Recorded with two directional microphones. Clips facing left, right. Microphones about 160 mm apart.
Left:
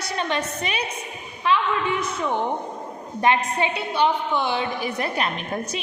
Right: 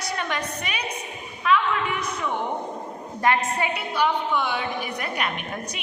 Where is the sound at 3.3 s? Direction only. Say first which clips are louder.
Left 2 dB; 20° left (ahead or behind).